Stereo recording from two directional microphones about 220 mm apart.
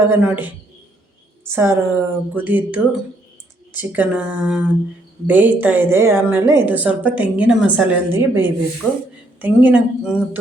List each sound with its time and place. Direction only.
0.1 s speech: 5° right (ahead or behind)
1.5 s a woman's voice: 10° right (ahead or behind)
3.8 s a woman's voice: 10° right (ahead or behind)